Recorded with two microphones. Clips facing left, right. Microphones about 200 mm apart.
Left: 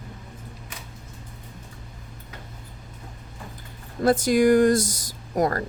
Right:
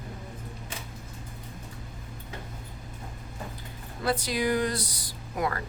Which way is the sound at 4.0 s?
45° left (ahead or behind).